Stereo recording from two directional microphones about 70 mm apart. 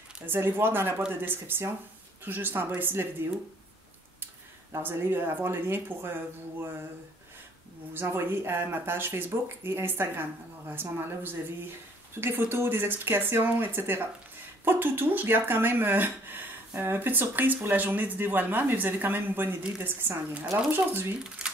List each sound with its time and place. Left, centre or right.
0.3 s speech: right
4.7 s speech: right
7.9 s speech: right